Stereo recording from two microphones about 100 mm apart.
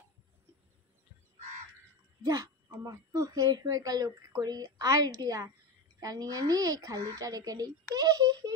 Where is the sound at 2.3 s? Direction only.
35° right (ahead or behind).